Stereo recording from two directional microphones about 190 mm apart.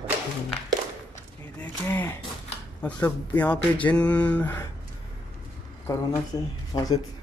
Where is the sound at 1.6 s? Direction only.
10° left (ahead or behind).